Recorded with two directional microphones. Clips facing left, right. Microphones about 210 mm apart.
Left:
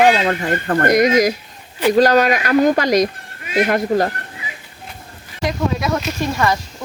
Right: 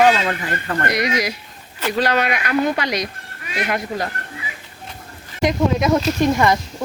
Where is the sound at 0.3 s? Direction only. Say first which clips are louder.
Left 5 dB; 40° left (ahead or behind).